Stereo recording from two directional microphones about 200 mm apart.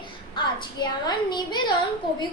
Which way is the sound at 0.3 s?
20° left (ahead or behind).